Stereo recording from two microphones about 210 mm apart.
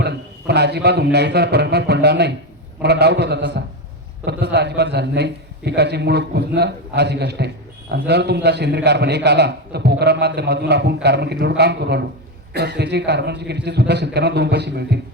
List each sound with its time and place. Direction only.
0.0 s a man's voice: 50° right (ahead or behind)